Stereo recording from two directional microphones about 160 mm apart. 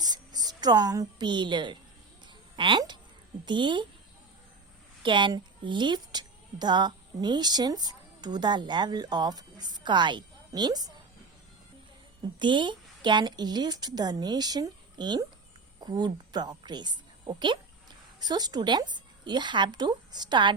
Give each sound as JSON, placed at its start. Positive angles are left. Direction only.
{"t": 0.0, "sound": "a woman's voice", "side_deg": -25}
{"t": 5.0, "sound": "a woman's voice", "side_deg": -30}
{"t": 12.4, "sound": "a woman's voice", "side_deg": -30}